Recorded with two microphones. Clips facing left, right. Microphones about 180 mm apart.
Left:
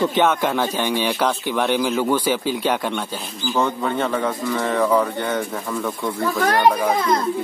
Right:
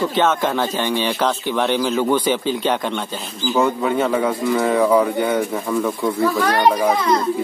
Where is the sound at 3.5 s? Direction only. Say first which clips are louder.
Right 3 dB; 10° right (ahead or behind).